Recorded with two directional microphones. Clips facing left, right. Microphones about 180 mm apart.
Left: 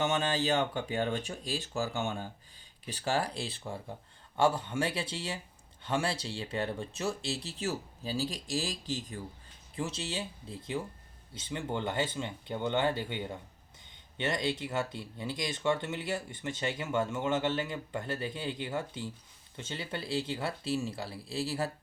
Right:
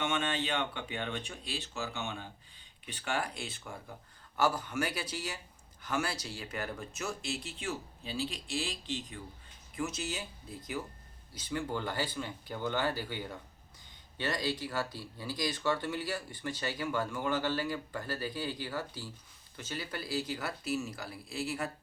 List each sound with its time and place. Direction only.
0.0 s speech: 35° left (ahead or behind)